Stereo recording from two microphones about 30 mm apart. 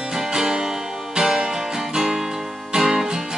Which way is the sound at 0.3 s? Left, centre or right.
Right.